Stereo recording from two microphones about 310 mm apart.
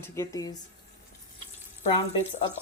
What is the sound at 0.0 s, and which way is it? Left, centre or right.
Speech, centre.